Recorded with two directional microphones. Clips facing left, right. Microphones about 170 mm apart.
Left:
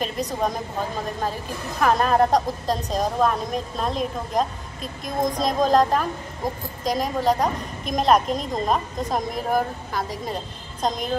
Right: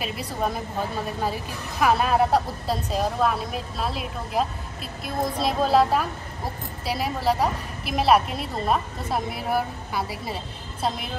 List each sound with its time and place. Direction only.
0.0 s speech: 10° right (ahead or behind)